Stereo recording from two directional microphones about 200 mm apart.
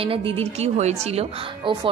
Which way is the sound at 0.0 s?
30° right (ahead or behind).